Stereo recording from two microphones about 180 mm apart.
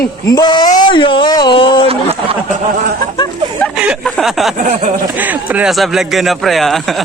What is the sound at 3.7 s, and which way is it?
Speech, 5° right (ahead or behind).